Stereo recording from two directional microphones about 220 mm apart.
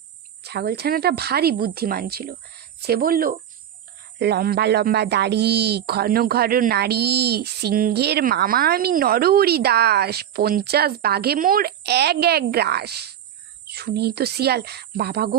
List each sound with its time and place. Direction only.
0.4 s speech: 45° right (ahead or behind)